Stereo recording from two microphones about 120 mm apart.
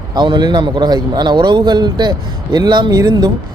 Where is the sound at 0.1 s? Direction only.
40° right (ahead or behind).